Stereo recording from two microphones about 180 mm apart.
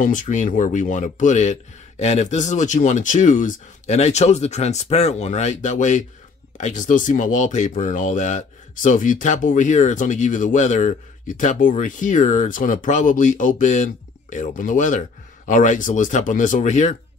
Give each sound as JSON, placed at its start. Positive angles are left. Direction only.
{"t": 0.0, "sound": "speech", "side_deg": 45}